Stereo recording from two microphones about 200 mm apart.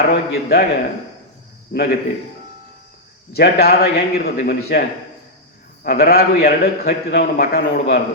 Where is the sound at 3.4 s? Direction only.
50° left (ahead or behind).